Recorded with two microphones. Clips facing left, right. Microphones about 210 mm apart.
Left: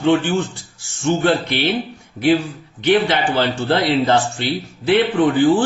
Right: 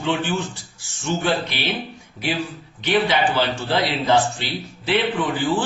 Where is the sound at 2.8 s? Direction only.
55° left (ahead or behind).